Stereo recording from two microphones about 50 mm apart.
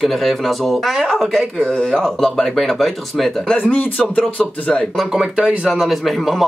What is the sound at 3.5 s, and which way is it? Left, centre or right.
Speech, left.